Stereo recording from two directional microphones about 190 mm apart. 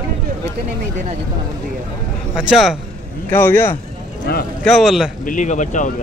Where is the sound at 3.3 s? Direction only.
10° left (ahead or behind).